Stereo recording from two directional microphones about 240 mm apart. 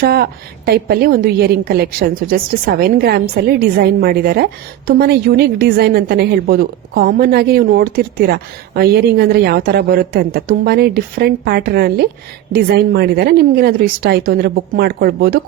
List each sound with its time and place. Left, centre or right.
0.0 s a woman's voice: right